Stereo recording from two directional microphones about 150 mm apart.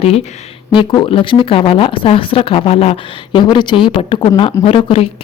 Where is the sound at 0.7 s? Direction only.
35° left (ahead or behind).